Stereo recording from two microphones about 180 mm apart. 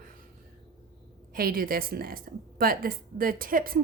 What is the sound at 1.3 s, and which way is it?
A woman's voice, 55° right (ahead or behind).